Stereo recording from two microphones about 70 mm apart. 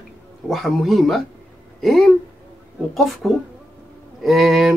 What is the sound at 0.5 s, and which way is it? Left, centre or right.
Speech, centre.